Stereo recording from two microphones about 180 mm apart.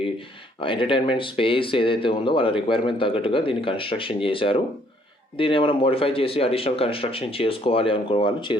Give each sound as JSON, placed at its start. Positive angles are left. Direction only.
{"t": 0.6, "sound": "speech", "side_deg": 30}